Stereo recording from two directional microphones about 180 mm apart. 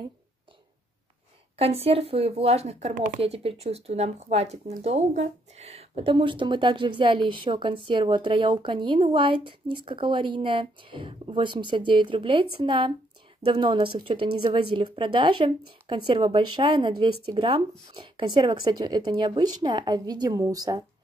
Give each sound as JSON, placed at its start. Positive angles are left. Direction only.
{"t": 1.6, "sound": "speech", "side_deg": -35}